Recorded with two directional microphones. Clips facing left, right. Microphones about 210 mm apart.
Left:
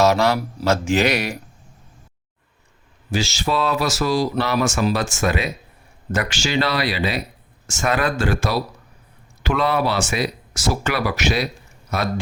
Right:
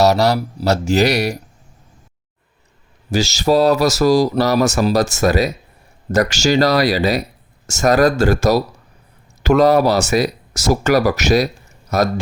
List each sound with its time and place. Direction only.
0.0 s speech: 40° right (ahead or behind)
3.1 s speech: 40° right (ahead or behind)